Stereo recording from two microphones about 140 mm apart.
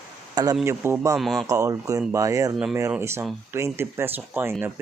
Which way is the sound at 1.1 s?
Centre (ahead or behind).